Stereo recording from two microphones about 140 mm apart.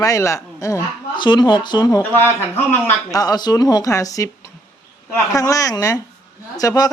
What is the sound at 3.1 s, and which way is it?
A woman's voice, 25° left (ahead or behind).